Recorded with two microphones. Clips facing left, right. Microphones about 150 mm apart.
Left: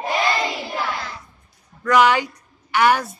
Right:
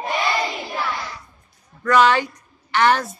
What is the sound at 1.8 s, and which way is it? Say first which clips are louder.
A woman's voice: even; 15° left (ahead or behind).